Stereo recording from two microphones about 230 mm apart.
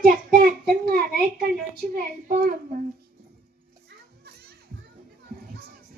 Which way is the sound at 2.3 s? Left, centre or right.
Right.